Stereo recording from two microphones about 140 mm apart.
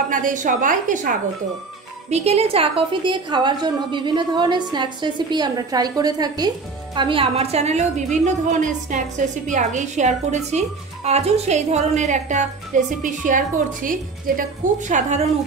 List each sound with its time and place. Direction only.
0.1 s a woman's voice: 70° right (ahead or behind)
2.0 s a woman's voice: 50° right (ahead or behind)